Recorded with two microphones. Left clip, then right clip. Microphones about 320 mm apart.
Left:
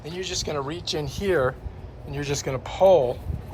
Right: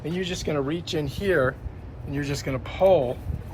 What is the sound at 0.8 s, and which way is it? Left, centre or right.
Speech, left.